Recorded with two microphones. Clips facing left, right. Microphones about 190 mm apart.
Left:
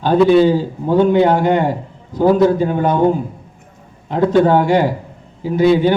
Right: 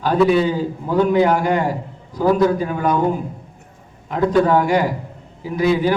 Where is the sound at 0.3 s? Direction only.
30° left (ahead or behind).